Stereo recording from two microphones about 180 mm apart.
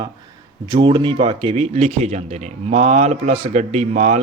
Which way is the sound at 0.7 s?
25° right (ahead or behind).